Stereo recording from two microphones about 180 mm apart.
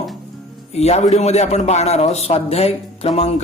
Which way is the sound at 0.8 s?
35° left (ahead or behind).